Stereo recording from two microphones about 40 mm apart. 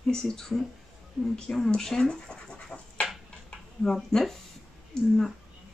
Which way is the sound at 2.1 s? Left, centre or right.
Left.